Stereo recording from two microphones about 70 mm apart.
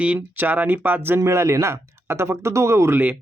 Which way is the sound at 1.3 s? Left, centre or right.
Right.